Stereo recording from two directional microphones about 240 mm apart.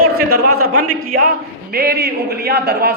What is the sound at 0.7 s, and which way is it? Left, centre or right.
A man's voice, right.